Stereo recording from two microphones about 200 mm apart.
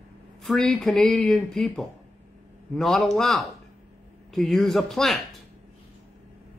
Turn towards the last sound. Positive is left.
turn(degrees=0)  # may be behind; listen again after turning